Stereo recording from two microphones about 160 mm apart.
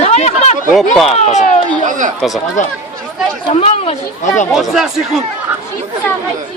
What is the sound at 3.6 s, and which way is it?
Speech, 40° left (ahead or behind).